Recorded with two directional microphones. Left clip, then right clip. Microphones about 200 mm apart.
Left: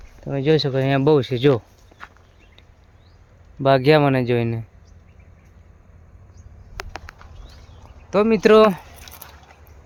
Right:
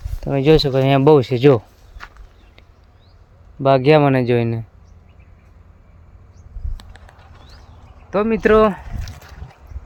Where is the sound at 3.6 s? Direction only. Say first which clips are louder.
Right 2 dB; 5° right (ahead or behind).